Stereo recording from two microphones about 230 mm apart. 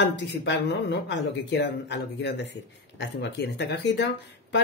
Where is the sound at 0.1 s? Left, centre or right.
Left.